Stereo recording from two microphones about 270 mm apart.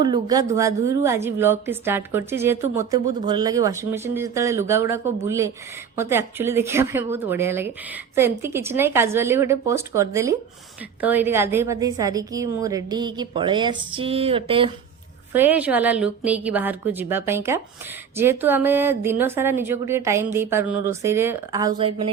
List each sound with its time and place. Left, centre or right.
0.0 s a woman's voice: centre
15.3 s a woman's voice: centre